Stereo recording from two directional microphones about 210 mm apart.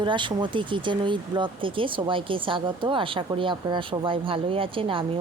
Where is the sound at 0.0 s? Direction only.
20° right (ahead or behind).